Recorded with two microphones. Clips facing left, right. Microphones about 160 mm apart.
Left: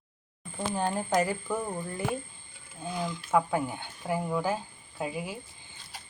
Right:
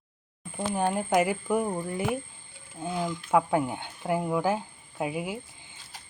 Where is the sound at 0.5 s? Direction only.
15° right (ahead or behind).